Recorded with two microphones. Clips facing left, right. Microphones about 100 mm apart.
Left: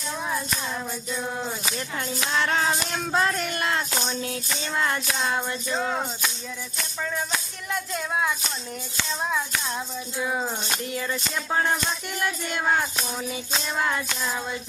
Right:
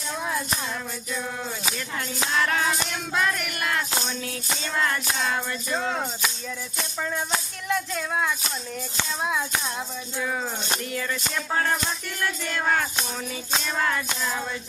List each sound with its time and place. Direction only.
2.4 s music: 30° left (ahead or behind)
5.7 s music: 5° left (ahead or behind)
7.9 s speech: 5° left (ahead or behind)
10.2 s music: 20° left (ahead or behind)
12.2 s music: 20° left (ahead or behind)